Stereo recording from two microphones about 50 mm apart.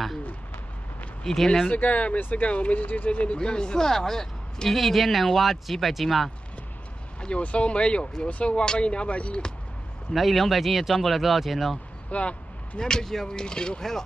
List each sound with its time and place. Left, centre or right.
1.2 s speech: centre
1.7 s speech: left
3.3 s speech: centre
7.2 s speech: left
10.1 s speech: centre
12.1 s a sound: left
12.8 s speech: centre